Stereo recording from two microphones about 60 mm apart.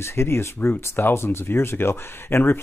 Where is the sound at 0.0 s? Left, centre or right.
Left.